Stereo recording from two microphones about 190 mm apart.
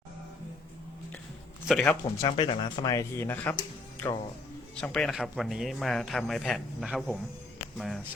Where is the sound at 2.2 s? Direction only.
25° left (ahead or behind); by 3.5 s 10° left (ahead or behind).